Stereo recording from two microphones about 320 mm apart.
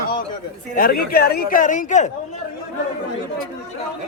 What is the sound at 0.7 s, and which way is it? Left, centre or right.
Speech, left.